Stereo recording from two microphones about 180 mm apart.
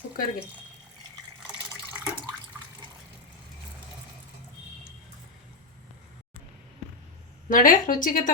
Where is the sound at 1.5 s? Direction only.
10° right (ahead or behind).